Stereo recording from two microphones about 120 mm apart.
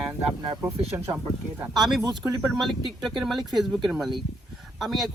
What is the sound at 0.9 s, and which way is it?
Speech, 25° right (ahead or behind).